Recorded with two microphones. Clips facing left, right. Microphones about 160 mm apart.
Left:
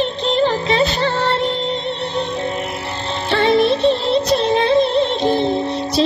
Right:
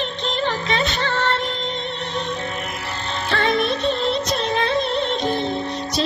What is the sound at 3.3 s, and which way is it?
Music, 30° left (ahead or behind).